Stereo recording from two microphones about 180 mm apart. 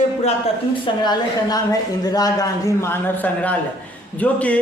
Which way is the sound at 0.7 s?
25° left (ahead or behind).